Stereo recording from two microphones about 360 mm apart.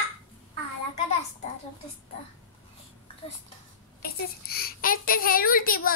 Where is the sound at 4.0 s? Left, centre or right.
Left.